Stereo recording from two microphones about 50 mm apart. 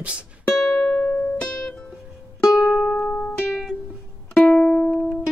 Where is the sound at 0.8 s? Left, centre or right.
Left.